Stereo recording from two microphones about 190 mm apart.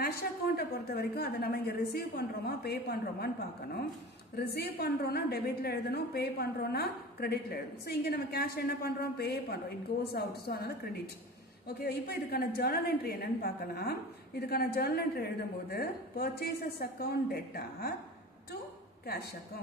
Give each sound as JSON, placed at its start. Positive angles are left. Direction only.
{"t": 0.6, "sound": "a woman's voice", "side_deg": 55}
{"t": 4.4, "sound": "a woman's voice", "side_deg": 55}
{"t": 11.8, "sound": "a woman's voice", "side_deg": 55}